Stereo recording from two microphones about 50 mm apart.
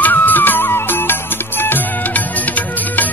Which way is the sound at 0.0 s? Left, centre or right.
Left.